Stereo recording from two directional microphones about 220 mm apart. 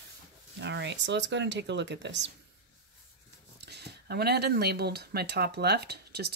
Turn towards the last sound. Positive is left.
turn(degrees=-45)  # may be behind; listen again after turning